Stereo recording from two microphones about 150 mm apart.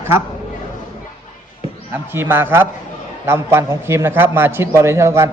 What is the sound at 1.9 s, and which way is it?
A man's voice, 15° right (ahead or behind).